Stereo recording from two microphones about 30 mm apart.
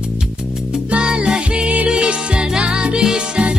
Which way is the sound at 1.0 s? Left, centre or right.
Right.